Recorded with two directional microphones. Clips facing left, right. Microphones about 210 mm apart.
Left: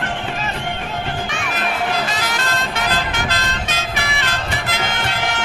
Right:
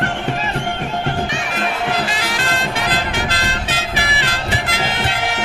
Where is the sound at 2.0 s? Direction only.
30° right (ahead or behind).